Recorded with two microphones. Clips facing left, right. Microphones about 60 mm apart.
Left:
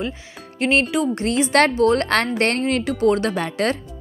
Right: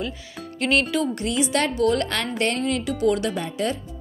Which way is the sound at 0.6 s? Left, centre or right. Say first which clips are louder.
Left 3 dB; left.